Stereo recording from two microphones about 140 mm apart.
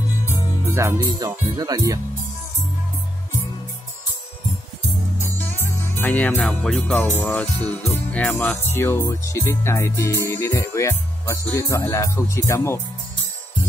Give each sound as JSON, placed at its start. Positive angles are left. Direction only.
{"t": 0.7, "sound": "speech", "side_deg": -20}
{"t": 5.4, "sound": "speech", "side_deg": 15}
{"t": 9.0, "sound": "music", "side_deg": 20}